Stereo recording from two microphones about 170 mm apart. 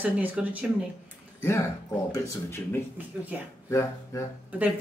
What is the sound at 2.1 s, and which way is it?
Speech, 15° left (ahead or behind).